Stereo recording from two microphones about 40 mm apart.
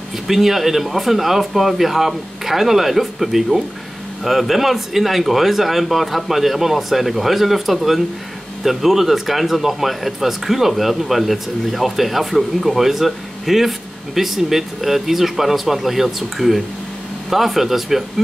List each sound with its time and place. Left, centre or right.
0.3 s speech: centre